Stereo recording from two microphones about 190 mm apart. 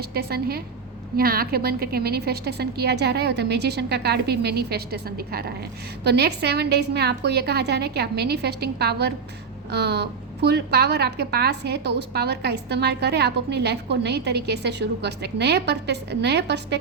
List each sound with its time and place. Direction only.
0.1 s a woman's voice: 55° right (ahead or behind)